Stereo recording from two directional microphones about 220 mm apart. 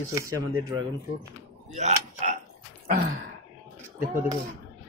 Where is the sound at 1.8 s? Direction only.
30° right (ahead or behind).